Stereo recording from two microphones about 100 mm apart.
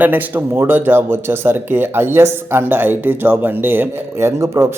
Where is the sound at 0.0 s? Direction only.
20° right (ahead or behind).